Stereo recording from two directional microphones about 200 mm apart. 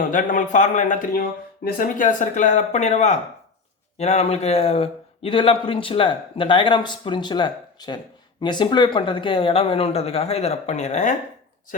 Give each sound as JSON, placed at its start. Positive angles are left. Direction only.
{"t": 0.0, "sound": "a man's voice", "side_deg": 40}